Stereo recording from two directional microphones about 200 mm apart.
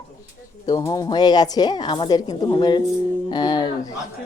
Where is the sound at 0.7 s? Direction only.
20° left (ahead or behind).